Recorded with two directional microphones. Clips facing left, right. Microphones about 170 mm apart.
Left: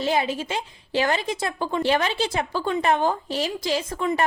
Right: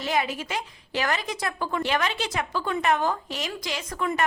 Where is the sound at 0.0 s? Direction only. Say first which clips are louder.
Left 3 dB; 30° left (ahead or behind).